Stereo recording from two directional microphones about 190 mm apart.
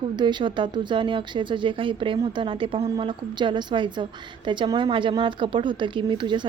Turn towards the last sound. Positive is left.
turn(degrees=-25)  # may be behind; listen again after turning